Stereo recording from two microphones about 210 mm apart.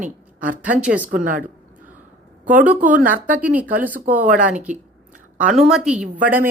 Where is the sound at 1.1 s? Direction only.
40° right (ahead or behind).